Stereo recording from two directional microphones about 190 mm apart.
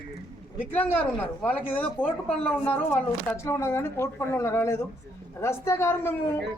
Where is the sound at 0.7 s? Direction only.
10° left (ahead or behind).